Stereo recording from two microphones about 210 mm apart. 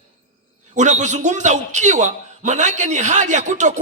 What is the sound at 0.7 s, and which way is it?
A man's voice, 35° right (ahead or behind).